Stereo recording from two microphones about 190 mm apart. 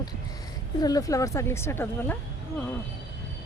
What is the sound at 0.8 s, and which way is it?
A woman's voice, 20° left (ahead or behind).